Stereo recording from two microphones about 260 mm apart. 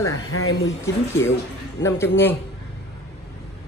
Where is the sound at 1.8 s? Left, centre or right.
Centre.